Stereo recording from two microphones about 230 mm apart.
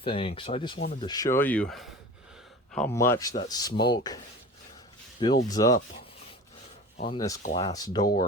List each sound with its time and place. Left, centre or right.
0.0 s speech: left
5.2 s speech: centre
7.1 s speech: centre